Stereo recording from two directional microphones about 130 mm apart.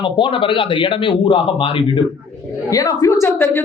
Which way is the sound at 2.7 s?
25° left (ahead or behind).